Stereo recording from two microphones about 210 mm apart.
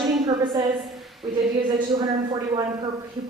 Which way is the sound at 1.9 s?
20° right (ahead or behind).